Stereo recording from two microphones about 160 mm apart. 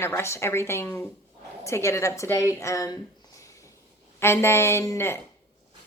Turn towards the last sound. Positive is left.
turn(degrees=15)  # may be behind; listen again after turning